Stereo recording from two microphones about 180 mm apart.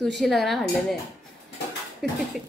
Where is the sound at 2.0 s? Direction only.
Centre (ahead or behind).